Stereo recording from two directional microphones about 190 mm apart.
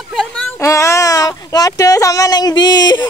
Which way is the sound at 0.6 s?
15° left (ahead or behind).